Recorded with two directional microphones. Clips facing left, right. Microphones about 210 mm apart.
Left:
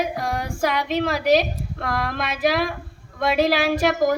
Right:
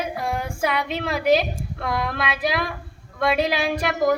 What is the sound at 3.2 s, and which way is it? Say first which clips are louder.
Speech: left 2 dB; centre (ahead or behind).